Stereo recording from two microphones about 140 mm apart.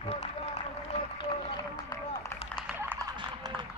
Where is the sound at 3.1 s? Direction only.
25° right (ahead or behind).